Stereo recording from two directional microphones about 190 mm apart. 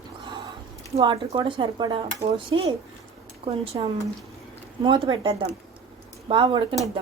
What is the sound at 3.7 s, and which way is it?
Speech, 20° right (ahead or behind).